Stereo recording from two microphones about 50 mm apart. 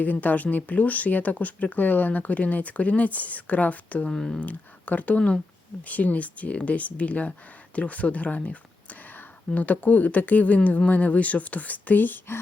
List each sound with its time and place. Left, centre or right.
0.0 s speech: left
4.1 s speech: centre
4.4 s speech: left
9.5 s speech: left